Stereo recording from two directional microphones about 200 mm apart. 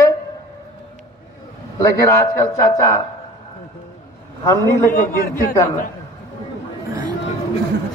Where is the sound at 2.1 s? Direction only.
15° left (ahead or behind).